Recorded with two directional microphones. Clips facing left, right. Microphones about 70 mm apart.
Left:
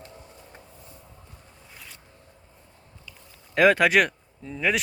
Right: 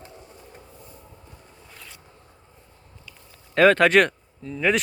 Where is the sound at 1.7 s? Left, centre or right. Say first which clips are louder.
Even; centre.